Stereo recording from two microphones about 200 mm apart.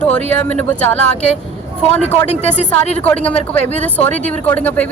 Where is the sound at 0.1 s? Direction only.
5° left (ahead or behind).